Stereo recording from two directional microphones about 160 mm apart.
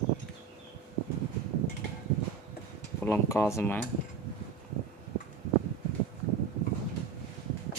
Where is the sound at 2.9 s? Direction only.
15° left (ahead or behind).